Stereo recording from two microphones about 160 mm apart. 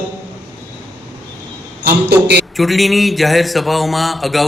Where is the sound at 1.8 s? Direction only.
90° right.